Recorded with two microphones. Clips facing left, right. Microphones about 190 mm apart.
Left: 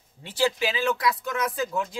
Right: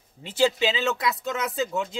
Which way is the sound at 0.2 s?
25° right (ahead or behind).